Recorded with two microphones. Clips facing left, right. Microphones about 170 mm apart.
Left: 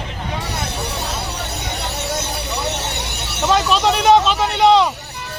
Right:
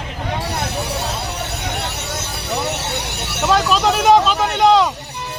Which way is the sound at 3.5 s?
Centre (ahead or behind).